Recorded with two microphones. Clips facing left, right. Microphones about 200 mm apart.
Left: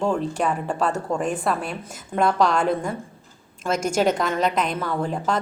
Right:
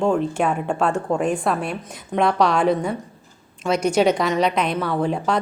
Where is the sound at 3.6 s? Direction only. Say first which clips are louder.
Right 3 dB; 45° left (ahead or behind).